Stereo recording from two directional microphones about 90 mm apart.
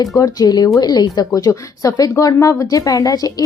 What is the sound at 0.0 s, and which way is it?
Speech, 40° left (ahead or behind).